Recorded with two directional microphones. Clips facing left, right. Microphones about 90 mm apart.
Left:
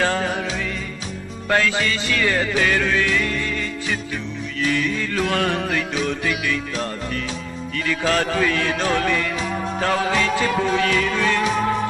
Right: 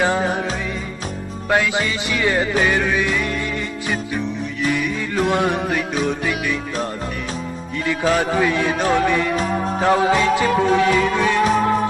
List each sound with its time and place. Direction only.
0.0 s music: 15° right (ahead or behind)
1.5 s music: 15° right (ahead or behind)
4.6 s music: 15° right (ahead or behind)
7.9 s music: 15° right (ahead or behind)